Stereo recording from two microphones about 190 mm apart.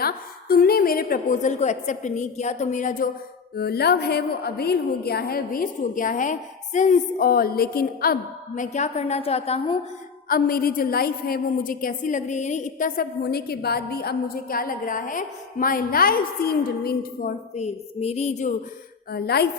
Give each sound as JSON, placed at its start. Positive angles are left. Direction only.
{"t": 0.0, "sound": "a woman's voice", "side_deg": 50}
{"t": 3.5, "sound": "a woman's voice", "side_deg": 55}
{"t": 10.2, "sound": "a woman's voice", "side_deg": 50}
{"t": 17.5, "sound": "a woman's voice", "side_deg": 35}
{"t": 19.1, "sound": "a woman's voice", "side_deg": 55}